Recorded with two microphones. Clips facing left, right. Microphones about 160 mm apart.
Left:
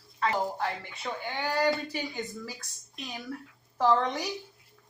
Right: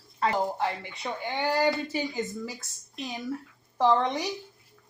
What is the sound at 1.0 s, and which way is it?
Speech, 20° right (ahead or behind).